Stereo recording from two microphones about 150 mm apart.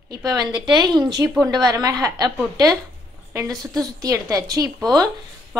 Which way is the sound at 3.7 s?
25° right (ahead or behind).